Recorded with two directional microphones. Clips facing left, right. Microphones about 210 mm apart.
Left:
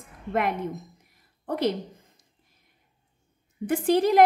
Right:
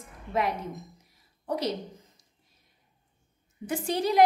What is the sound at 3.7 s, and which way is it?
Speech, 55° left (ahead or behind).